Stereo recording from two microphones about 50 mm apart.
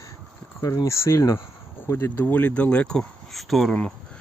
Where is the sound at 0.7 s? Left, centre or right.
Left.